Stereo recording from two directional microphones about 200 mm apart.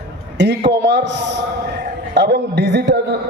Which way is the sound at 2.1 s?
60° right (ahead or behind).